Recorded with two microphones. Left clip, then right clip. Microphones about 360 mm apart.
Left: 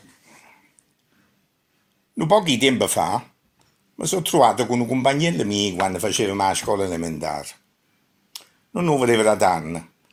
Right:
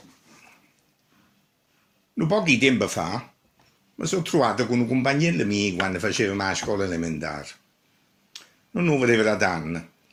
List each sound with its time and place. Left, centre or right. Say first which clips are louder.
2.1 s speech: left 4 dB; centre
8.3 s a sound: left 3 dB; centre
9.4 s speech: left 5 dB; centre